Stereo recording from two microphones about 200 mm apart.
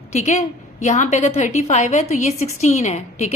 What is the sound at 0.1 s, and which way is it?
A woman's voice, 35° left (ahead or behind).